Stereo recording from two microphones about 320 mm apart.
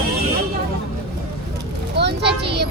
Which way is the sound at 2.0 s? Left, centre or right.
Right.